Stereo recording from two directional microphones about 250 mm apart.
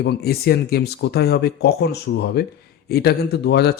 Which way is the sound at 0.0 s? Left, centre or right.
Left.